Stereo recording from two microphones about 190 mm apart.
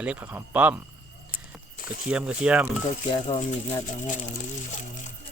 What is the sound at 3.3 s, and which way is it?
Speech, 35° left (ahead or behind).